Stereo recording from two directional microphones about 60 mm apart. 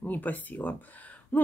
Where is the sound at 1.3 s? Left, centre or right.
Left.